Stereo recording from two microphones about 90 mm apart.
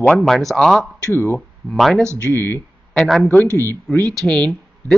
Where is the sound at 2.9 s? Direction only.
Centre (ahead or behind).